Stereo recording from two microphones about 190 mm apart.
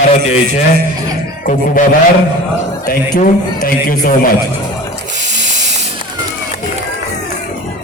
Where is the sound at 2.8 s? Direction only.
45° left (ahead or behind).